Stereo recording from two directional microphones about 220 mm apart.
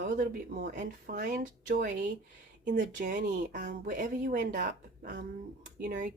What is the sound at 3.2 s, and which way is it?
Speech, 35° right (ahead or behind).